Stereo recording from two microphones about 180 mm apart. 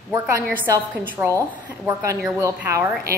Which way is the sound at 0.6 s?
15° right (ahead or behind).